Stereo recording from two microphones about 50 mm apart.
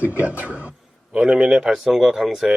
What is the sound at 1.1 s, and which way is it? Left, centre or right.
A man's voice, centre.